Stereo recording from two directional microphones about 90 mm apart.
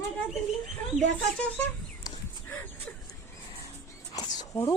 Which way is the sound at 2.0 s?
45° left (ahead or behind).